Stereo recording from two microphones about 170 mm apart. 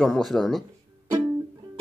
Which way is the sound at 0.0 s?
Centre (ahead or behind).